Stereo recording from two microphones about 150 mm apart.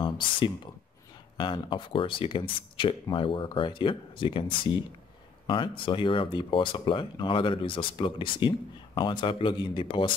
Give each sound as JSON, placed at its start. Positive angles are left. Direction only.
{"t": 1.4, "sound": "speech", "side_deg": 35}